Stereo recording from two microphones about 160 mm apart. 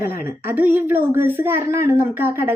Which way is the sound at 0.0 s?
65° left (ahead or behind).